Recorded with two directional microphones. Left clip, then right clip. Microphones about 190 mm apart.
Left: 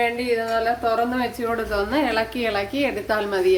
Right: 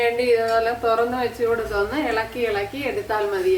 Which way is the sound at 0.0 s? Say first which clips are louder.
Right 3 dB; 30° left (ahead or behind).